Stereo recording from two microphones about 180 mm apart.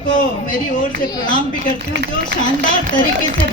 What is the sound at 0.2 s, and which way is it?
Speech, 45° left (ahead or behind).